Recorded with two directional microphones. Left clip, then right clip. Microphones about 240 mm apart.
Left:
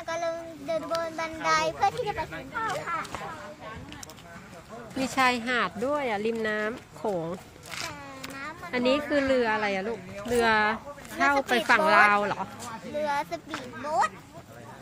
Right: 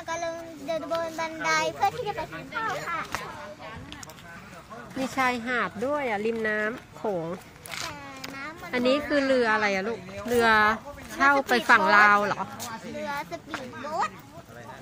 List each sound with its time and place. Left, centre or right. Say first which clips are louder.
0.0 s a child's voice: left 1 dB; centre
5.0 s speech: left 2 dB; centre
13.0 s speech: left 5 dB; left